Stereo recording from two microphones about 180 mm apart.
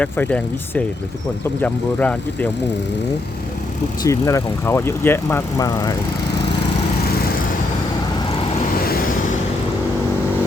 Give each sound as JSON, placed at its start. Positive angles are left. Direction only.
{"t": 0.0, "sound": "speech", "side_deg": 5}
{"t": 4.0, "sound": "speech", "side_deg": 20}
{"t": 8.8, "sound": "vehicle", "side_deg": 55}